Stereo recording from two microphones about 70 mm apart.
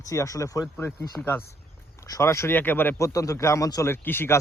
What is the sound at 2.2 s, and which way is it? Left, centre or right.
Speech, left.